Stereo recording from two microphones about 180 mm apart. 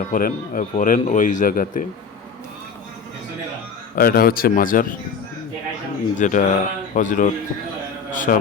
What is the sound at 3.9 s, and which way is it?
Speech, 55° left (ahead or behind).